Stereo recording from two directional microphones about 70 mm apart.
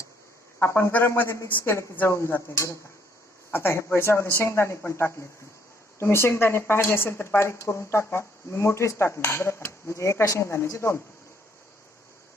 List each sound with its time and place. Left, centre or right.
0.6 s speech: left
2.0 s speech: left